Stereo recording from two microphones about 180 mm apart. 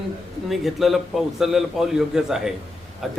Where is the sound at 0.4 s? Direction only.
Centre (ahead or behind).